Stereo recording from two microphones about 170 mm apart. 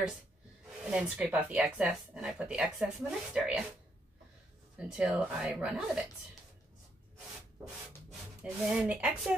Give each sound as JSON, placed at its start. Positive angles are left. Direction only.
{"t": 0.8, "sound": "speech", "side_deg": -5}
{"t": 4.7, "sound": "speech", "side_deg": -5}
{"t": 8.6, "sound": "speech", "side_deg": -5}